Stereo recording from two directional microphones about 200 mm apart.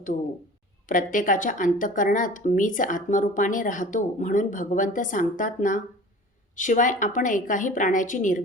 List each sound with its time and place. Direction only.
0.9 s speech: 40° left (ahead or behind)